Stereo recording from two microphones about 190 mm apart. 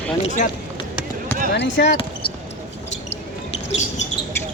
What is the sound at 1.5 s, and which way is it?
Speech, 70° left (ahead or behind).